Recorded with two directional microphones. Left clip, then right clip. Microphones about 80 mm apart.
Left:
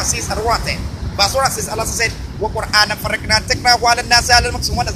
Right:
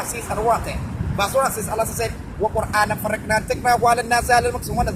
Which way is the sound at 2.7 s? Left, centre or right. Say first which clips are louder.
Left 5 dB; right.